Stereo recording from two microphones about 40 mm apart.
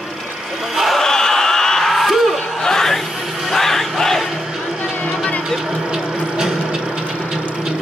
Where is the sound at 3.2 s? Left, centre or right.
Centre.